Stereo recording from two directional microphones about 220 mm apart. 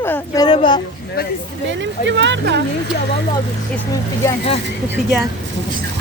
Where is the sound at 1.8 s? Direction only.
55° right (ahead or behind).